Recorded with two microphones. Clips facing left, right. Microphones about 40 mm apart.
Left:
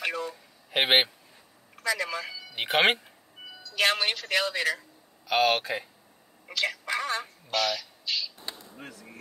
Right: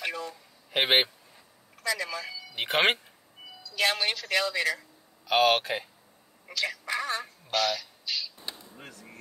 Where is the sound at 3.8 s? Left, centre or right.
Left.